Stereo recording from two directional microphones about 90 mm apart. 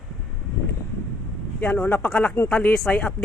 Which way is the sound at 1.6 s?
15° left (ahead or behind).